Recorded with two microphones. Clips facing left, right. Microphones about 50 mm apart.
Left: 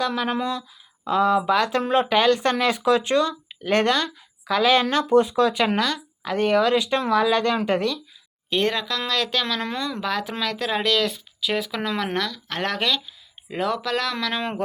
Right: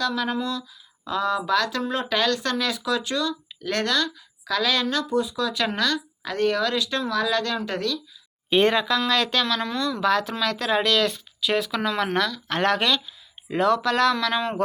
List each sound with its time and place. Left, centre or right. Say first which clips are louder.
1.0 s speech: left 5 dB; centre
5.0 s speech: left 7 dB; left
5.7 s speech: left 1 dB; centre
8.4 s speech: right 4 dB; centre
9.7 s speech: right 2 dB; centre
10.0 s speech: right 6 dB; centre